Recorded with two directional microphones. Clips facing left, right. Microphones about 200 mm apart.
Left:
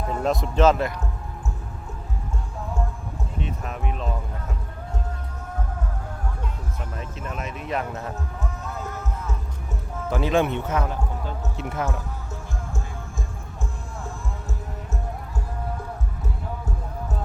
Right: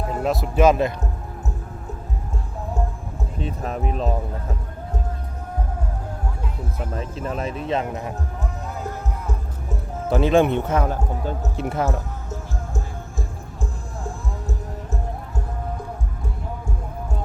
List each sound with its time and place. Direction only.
0.1 s speech: 5° right (ahead or behind)
3.4 s speech: 35° right (ahead or behind)
6.9 s speech: 35° right (ahead or behind)
10.1 s speech: 30° right (ahead or behind); by 11.7 s 45° right (ahead or behind)